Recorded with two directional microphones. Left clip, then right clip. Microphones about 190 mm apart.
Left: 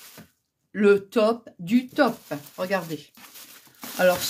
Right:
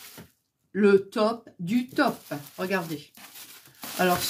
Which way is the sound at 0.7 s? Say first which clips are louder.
Left 2 dB; 45° left (ahead or behind).